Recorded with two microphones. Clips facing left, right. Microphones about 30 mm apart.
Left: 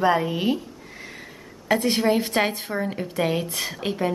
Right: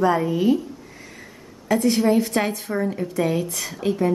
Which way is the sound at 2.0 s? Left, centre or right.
Left.